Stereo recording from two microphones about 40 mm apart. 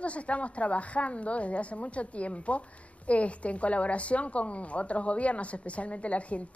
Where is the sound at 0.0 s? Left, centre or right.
Left.